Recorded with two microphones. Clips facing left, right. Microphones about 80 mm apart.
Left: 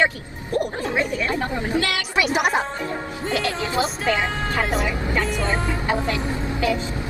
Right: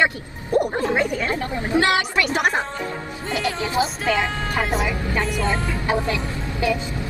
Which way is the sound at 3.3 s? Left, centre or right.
Centre.